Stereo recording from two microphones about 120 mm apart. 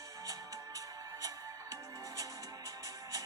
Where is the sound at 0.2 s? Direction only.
30° right (ahead or behind).